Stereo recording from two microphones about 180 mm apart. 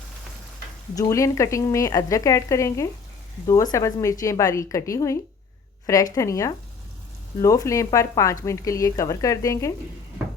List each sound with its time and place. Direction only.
0.9 s a woman's voice: 20° left (ahead or behind)